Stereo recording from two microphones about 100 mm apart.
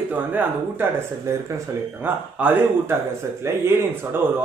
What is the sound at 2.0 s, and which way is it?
Speech, 20° right (ahead or behind).